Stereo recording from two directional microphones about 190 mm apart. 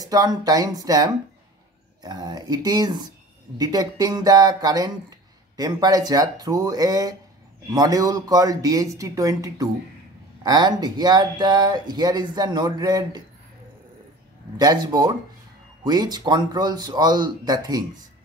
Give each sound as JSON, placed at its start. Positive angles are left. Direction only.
{"t": 0.0, "sound": "speech", "side_deg": -20}
{"t": 14.6, "sound": "speech", "side_deg": -20}